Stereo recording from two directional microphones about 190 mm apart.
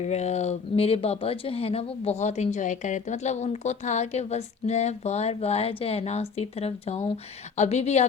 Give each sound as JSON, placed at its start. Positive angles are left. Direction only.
{"t": 0.0, "sound": "speech", "side_deg": 35}